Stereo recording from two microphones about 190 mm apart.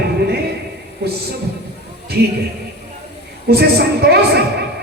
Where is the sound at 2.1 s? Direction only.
55° right (ahead or behind).